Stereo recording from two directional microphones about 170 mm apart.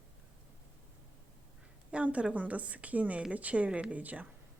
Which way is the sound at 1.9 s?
5° right (ahead or behind).